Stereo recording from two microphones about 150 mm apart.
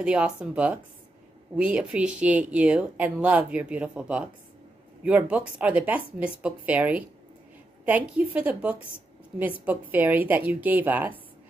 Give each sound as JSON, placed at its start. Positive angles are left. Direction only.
{"t": 0.0, "sound": "speech", "side_deg": -5}